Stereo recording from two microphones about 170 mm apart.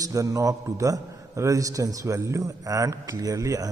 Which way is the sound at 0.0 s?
20° right (ahead or behind).